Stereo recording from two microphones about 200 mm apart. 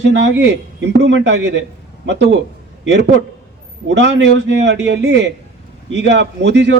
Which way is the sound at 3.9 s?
60° right (ahead or behind).